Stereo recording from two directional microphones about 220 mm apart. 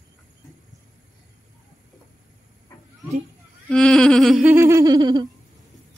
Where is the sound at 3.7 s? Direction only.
5° left (ahead or behind); by 5.3 s 20° right (ahead or behind).